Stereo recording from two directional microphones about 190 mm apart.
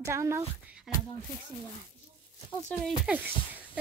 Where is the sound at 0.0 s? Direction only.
15° right (ahead or behind).